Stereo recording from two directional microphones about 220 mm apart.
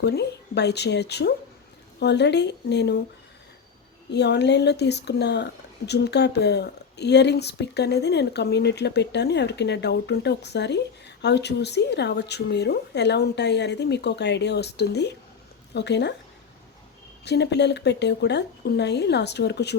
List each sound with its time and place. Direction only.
0.0 s speech: 50° left (ahead or behind)
4.1 s speech: 50° left (ahead or behind)
17.2 s speech: 50° left (ahead or behind)